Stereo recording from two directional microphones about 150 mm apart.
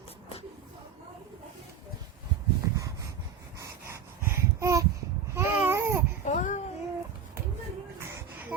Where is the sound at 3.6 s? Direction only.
15° right (ahead or behind).